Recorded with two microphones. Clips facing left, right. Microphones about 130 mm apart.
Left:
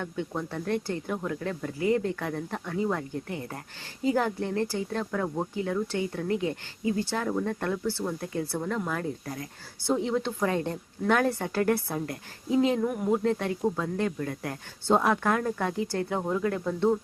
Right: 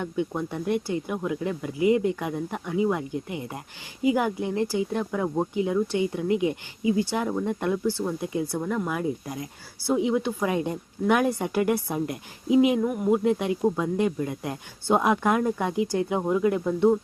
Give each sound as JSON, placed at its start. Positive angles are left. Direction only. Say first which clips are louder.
{"t": 0.0, "sound": "speech", "louder": "right 4 dB", "side_deg": -15}
{"t": 13.2, "sound": "speech", "louder": "right 3 dB", "side_deg": -15}